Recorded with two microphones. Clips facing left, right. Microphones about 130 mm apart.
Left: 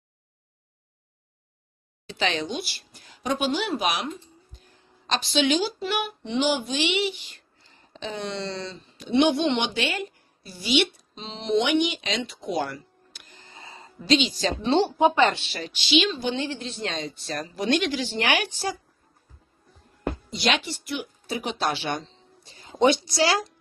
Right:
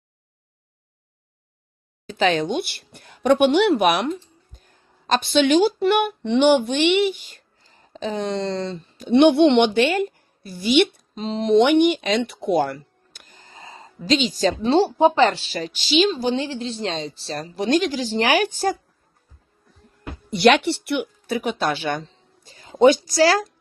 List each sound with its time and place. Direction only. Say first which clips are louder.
2.0 s speech: right 7 dB; 45° right (ahead or behind)
4.5 s speech: even; 50° right (ahead or behind)
20.3 s a woman's voice: right 12 dB; 60° right (ahead or behind); by 23.5 s 45° right (ahead or behind)